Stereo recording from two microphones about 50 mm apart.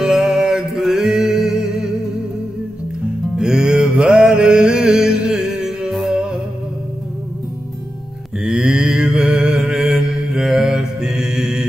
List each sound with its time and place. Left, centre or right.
0.0 s music: centre
3.3 s music: centre
4.0 s mantra: centre
6.1 s music: centre
8.5 s mantra: centre